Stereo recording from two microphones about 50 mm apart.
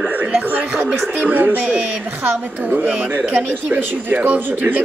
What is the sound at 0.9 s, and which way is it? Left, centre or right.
Speech, right.